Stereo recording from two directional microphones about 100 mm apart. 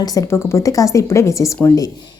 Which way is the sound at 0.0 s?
40° left (ahead or behind).